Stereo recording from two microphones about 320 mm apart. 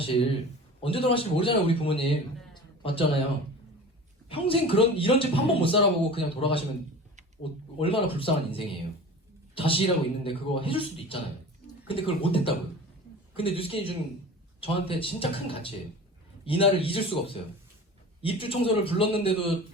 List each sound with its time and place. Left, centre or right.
0.0 s a man's voice: centre
2.6 s a sound: centre
4.3 s a man's voice: centre
7.8 s a man's voice: centre